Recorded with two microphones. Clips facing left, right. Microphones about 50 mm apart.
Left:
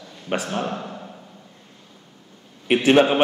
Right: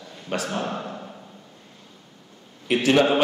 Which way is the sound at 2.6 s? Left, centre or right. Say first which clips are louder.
Left 3 dB; left.